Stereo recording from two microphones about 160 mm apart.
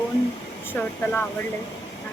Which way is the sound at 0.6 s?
15° left (ahead or behind).